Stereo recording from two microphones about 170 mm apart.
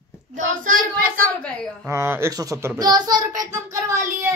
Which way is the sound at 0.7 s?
55° right (ahead or behind).